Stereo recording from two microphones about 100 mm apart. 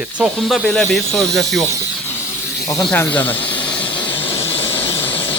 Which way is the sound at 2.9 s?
15° left (ahead or behind).